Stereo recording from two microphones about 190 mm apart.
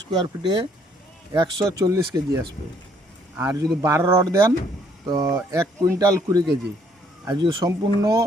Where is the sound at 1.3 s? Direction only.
20° right (ahead or behind).